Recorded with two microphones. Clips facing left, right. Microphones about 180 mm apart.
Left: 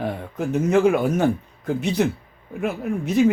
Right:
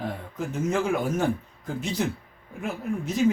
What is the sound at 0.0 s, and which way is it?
A man's voice, 65° left (ahead or behind).